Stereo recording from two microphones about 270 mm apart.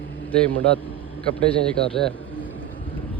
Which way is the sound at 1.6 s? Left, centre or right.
Centre.